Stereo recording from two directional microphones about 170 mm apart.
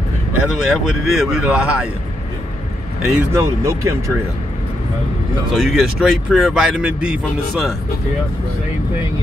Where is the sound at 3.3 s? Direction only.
15° right (ahead or behind).